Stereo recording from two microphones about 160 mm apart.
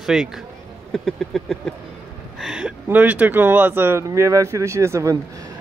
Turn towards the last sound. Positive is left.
turn(degrees=-20)  # may be behind; listen again after turning